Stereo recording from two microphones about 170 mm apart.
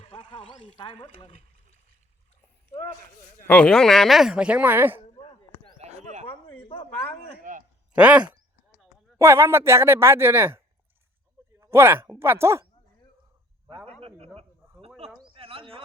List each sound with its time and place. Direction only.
0.0 s speech: 30° left (ahead or behind)
2.7 s speech: 35° left (ahead or behind)
3.4 s speech: 10° left (ahead or behind); by 4.9 s 10° right (ahead or behind)
4.9 s chop: 30° left (ahead or behind)
5.8 s a sound: 40° right (ahead or behind)
6.7 s speech: 30° left (ahead or behind)
7.5 s a sound: 50° right (ahead or behind)
7.9 s speech: 5° right (ahead or behind)
11.6 s speech: 15° right (ahead or behind)
14.0 s a sound: 35° right (ahead or behind)